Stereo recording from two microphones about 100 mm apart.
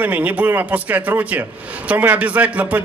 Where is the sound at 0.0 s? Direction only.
15° right (ahead or behind).